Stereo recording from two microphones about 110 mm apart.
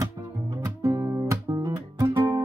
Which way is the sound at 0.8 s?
30° right (ahead or behind).